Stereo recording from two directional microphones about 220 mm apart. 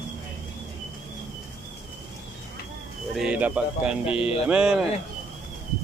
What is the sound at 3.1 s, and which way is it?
Speech, 5° right (ahead or behind).